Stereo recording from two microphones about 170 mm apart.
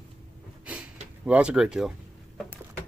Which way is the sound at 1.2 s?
5° right (ahead or behind).